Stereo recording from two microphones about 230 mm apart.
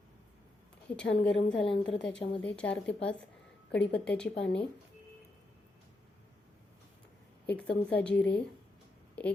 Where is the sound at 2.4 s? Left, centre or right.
Centre.